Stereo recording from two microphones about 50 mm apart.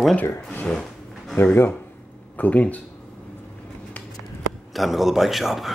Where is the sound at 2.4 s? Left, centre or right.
Left.